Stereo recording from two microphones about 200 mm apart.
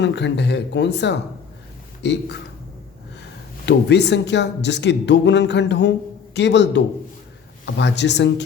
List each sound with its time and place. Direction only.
0.0 s a man's voice: 60° left (ahead or behind)
3.7 s speech: 60° left (ahead or behind)